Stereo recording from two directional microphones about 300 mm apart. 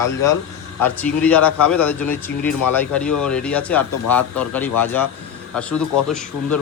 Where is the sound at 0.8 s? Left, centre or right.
Centre.